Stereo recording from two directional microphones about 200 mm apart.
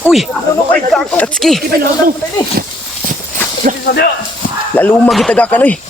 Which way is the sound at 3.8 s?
55° left (ahead or behind).